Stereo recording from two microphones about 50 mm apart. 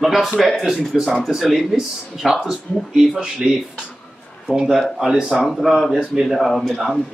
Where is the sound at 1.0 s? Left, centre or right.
Centre.